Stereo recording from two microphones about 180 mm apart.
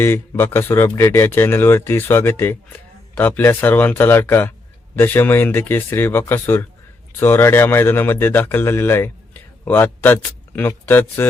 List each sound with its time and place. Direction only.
0.0 s speech: 10° left (ahead or behind)